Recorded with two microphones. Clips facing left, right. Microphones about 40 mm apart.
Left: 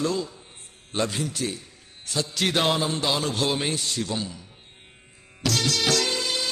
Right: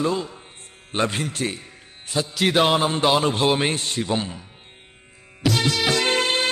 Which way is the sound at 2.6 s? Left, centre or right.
Right.